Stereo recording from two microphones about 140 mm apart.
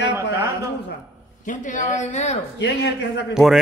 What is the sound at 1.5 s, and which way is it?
Speech, 65° left (ahead or behind).